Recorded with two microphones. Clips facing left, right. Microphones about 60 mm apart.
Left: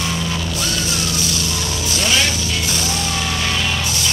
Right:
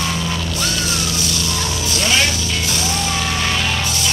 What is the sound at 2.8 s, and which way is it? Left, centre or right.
Music, centre.